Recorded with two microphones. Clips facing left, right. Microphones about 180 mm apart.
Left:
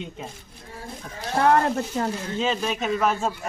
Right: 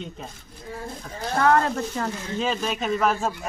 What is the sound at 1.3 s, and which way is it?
Speech, 25° left (ahead or behind).